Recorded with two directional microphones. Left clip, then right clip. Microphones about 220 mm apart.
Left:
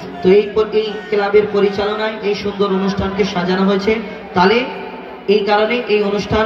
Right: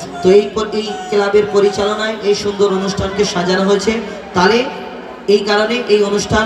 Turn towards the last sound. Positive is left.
turn(degrees=-60)  # may be behind; listen again after turning